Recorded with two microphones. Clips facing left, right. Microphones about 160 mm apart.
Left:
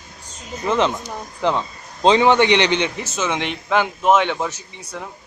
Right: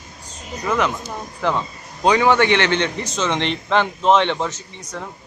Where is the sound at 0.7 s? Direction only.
25° left (ahead or behind).